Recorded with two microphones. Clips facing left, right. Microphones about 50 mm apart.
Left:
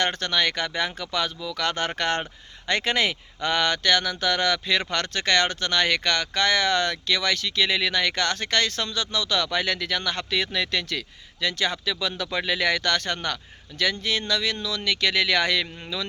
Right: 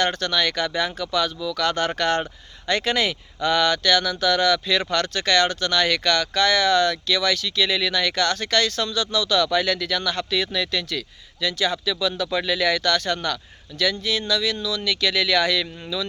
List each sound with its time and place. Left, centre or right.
0.0 s speech: left